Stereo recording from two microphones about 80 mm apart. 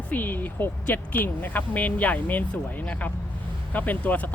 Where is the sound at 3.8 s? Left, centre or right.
Left.